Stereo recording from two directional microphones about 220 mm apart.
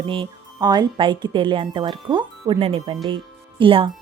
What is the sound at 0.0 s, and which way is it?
Speech, 25° right (ahead or behind).